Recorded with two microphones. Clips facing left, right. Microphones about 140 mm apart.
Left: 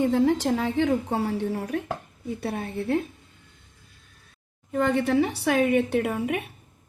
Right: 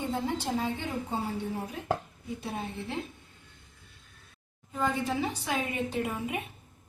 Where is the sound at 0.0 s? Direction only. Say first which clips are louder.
Left 10 dB; 90° left.